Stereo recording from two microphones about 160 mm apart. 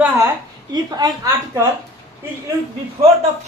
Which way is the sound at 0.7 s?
25° right (ahead or behind).